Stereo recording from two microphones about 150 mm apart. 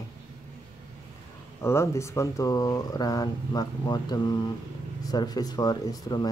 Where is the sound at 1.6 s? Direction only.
15° left (ahead or behind).